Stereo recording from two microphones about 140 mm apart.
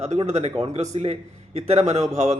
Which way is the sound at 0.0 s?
55° right (ahead or behind).